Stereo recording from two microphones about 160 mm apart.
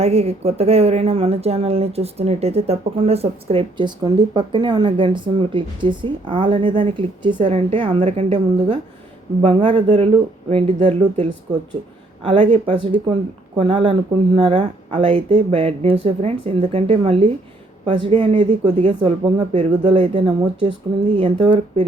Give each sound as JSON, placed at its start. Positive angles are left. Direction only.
{"t": 0.0, "sound": "speech", "side_deg": -40}